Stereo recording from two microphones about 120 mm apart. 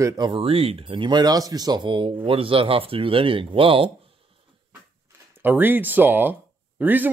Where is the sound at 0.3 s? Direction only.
50° right (ahead or behind).